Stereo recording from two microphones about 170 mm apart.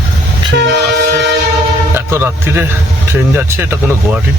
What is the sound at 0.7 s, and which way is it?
Train, 85° right.